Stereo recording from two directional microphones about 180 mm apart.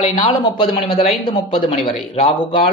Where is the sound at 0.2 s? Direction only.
30° left (ahead or behind).